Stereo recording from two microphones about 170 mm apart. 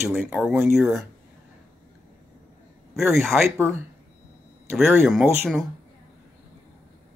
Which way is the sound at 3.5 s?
15° right (ahead or behind).